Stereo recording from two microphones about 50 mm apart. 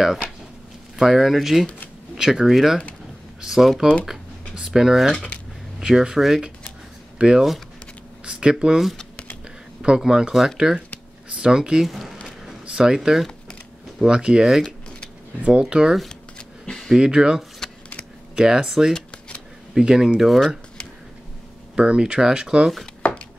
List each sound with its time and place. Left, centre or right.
0.0 s speech: centre
11.9 s a sound: centre
12.6 s speech: centre
15.6 s speech: centre
16.1 s a sound: centre
16.9 s speech: centre
17.6 s a sound: centre
18.3 s speech: centre
18.9 s shuffling cards: left
19.7 s speech: centre
20.2 s speech: centre
21.7 s speech: centre
23.0 s chopping: left